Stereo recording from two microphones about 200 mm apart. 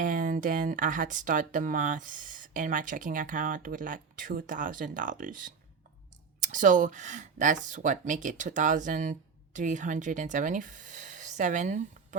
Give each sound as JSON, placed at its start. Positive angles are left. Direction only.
{"t": 0.0, "sound": "speech", "side_deg": -40}